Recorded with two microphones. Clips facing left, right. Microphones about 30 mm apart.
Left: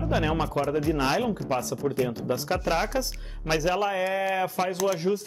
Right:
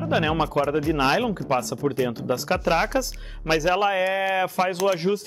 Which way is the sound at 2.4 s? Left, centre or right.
Right.